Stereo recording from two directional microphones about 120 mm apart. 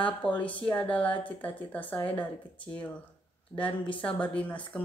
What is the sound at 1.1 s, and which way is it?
Speech, 45° left (ahead or behind).